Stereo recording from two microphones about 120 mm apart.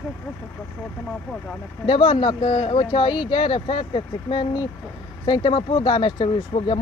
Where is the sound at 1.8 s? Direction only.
45° left (ahead or behind).